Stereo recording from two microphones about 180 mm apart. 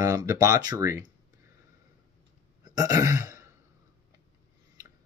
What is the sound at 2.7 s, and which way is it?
Throat clearing, 20° right (ahead or behind).